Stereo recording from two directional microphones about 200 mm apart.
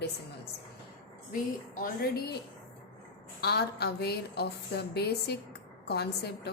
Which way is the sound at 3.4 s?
55° left (ahead or behind).